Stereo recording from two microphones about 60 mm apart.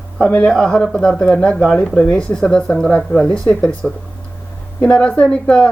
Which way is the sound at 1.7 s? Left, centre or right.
Left.